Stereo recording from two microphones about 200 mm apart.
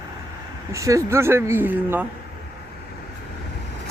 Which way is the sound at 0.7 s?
15° right (ahead or behind).